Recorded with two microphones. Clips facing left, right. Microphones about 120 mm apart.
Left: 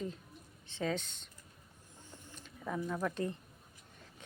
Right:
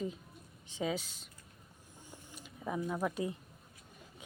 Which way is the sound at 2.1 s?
10° right (ahead or behind).